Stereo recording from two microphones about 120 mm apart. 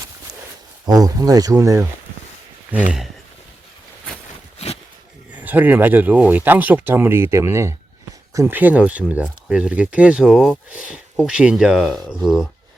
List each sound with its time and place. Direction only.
0.9 s speech: 30° right (ahead or behind)
4.5 s a sound: 60° left (ahead or behind)
5.3 s speech: 15° right (ahead or behind)
8.5 s speech: 15° right (ahead or behind)